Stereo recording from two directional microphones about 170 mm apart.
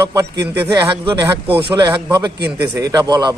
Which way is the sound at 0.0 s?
20° right (ahead or behind).